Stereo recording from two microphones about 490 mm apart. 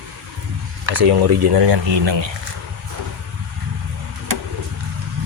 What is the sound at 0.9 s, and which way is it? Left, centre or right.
Speech, right.